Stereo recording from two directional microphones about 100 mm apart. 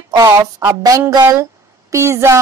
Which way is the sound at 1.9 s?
25° right (ahead or behind).